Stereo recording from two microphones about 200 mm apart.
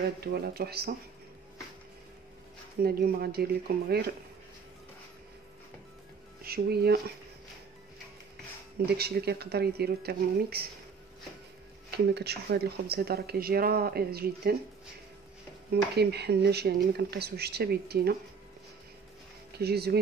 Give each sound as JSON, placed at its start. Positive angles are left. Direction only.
{"t": 0.2, "sound": "speech", "side_deg": -50}
{"t": 2.8, "sound": "speech", "side_deg": -50}
{"t": 6.4, "sound": "speech", "side_deg": -50}
{"t": 8.8, "sound": "speech", "side_deg": -50}
{"t": 12.1, "sound": "speech", "side_deg": -55}
{"t": 15.7, "sound": "speech", "side_deg": -55}
{"t": 19.5, "sound": "speech", "side_deg": -55}